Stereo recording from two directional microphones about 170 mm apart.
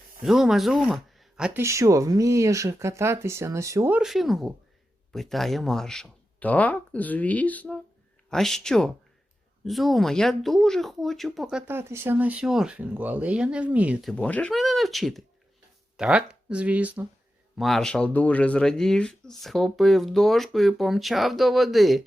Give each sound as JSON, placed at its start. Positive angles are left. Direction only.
{"t": 0.3, "sound": "speech", "side_deg": 0}
{"t": 1.6, "sound": "speech", "side_deg": -20}
{"t": 17.6, "sound": "speech", "side_deg": 0}